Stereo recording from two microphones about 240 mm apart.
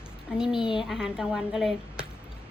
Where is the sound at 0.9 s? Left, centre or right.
Centre.